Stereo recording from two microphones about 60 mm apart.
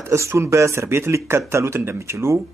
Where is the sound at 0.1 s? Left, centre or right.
Right.